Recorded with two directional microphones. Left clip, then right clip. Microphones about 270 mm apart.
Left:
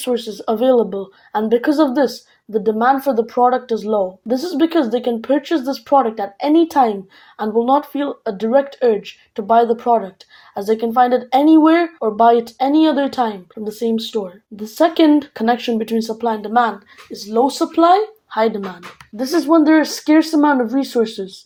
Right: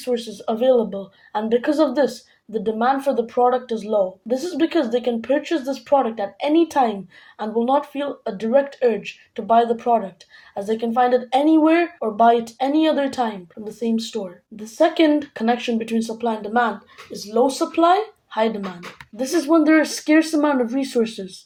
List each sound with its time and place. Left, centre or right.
0.0 s speech: left
19.1 s speech: centre